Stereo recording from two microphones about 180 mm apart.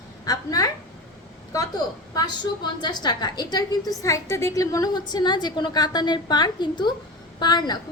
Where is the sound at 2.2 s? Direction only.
25° left (ahead or behind).